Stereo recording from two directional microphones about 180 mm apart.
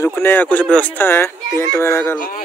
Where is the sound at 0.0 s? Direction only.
10° left (ahead or behind).